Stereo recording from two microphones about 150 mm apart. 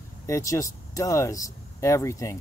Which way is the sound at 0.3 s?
20° left (ahead or behind).